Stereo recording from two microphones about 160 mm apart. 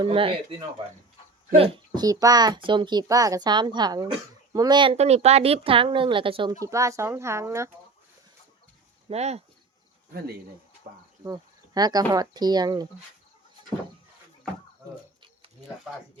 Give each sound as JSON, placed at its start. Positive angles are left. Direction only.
{"t": 0.0, "sound": "speech", "side_deg": -35}
{"t": 1.5, "sound": "speech", "side_deg": -35}
{"t": 2.0, "sound": "a child's voice", "side_deg": -20}
{"t": 9.0, "sound": "speech", "side_deg": -40}
{"t": 10.1, "sound": "speech", "side_deg": -75}
{"t": 11.2, "sound": "a child's voice", "side_deg": -25}